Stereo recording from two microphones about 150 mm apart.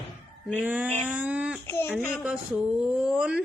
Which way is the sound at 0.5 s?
10° right (ahead or behind).